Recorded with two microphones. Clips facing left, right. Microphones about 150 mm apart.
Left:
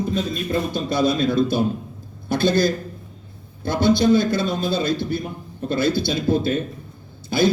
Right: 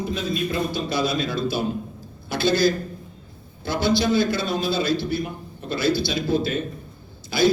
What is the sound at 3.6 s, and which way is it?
Speech, 50° left (ahead or behind).